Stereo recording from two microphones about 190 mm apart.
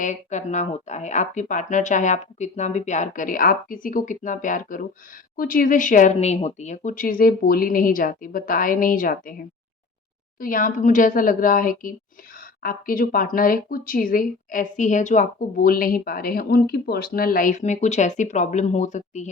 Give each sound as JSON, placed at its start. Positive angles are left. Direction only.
{"t": 0.0, "sound": "speech", "side_deg": 40}
{"t": 10.4, "sound": "speech", "side_deg": 45}